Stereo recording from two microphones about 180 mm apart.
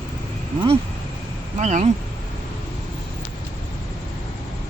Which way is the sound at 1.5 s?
40° right (ahead or behind).